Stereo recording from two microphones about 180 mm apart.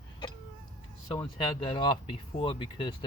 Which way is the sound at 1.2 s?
25° left (ahead or behind).